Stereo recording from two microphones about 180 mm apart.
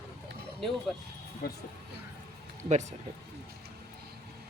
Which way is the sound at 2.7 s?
40° right (ahead or behind).